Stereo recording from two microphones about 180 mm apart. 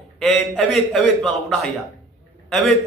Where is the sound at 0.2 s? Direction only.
Centre (ahead or behind).